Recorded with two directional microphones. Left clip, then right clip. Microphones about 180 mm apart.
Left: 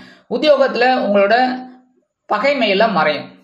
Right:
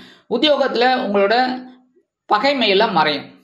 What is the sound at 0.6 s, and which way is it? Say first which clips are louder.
Speech: left 2 dB; 25° right (ahead or behind).